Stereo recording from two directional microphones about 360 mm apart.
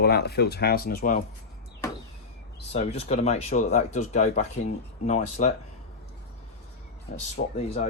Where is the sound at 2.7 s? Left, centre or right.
Centre.